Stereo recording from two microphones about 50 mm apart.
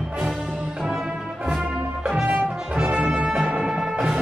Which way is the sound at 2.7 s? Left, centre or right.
Centre.